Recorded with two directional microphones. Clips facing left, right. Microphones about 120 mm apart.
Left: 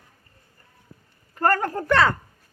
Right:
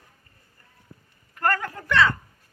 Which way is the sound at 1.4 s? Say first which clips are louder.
Left 4 dB; 40° left (ahead or behind).